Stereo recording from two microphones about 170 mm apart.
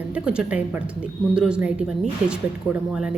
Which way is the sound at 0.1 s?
5° right (ahead or behind).